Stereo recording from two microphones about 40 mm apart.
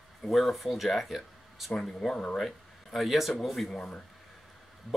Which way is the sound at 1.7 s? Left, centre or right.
Centre.